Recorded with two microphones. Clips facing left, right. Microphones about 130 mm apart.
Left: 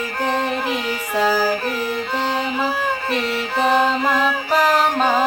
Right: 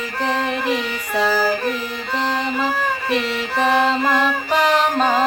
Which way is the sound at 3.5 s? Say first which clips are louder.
Even; 15° left (ahead or behind).